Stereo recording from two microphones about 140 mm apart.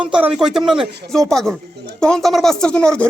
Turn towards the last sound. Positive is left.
turn(degrees=5)  # may be behind; listen again after turning